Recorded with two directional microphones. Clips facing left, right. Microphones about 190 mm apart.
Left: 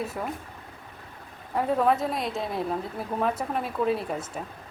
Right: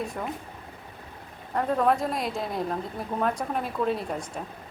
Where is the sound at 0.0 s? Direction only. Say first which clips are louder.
Even; 5° left (ahead or behind).